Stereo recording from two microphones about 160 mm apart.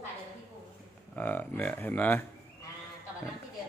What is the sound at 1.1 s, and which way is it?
Speech, 10° left (ahead or behind).